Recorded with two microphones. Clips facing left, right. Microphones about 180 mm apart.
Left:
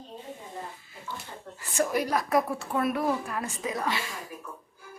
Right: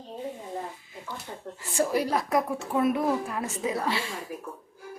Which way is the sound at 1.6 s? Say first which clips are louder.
Right 1 dB; 30° right (ahead or behind).